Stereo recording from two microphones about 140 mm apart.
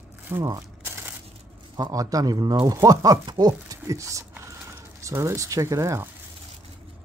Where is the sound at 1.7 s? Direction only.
25° right (ahead or behind).